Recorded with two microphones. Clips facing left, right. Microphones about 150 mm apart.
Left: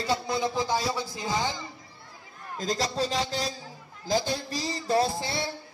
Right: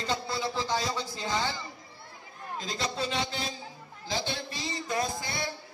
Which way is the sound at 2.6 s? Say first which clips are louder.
Left 5 dB; 40° left (ahead or behind).